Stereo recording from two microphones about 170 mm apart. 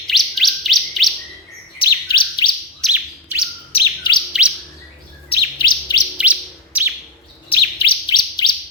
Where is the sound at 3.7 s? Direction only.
30° left (ahead or behind).